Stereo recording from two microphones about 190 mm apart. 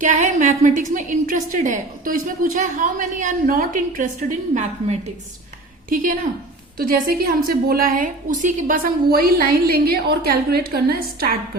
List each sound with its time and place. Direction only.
0.0 s a woman's voice: 40° right (ahead or behind)